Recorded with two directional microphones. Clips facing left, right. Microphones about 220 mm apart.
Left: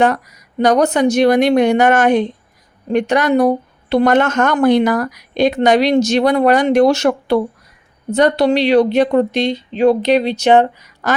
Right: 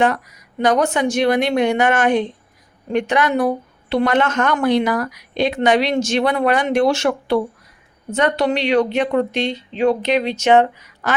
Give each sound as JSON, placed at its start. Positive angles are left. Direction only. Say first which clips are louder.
{"t": 0.6, "sound": "a woman's voice", "louder": "left 4 dB", "side_deg": 40}